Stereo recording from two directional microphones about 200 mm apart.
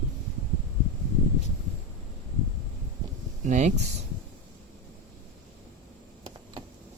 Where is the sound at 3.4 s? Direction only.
35° right (ahead or behind).